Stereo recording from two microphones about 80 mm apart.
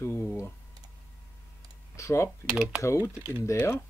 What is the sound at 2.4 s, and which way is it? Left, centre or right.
Speech, centre.